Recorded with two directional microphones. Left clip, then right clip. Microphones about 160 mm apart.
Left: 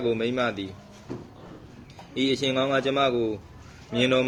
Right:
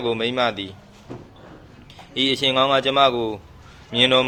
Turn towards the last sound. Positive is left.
turn(degrees=20)  # may be behind; listen again after turning